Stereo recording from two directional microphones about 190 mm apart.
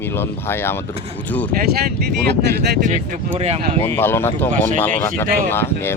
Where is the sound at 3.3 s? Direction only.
35° right (ahead or behind).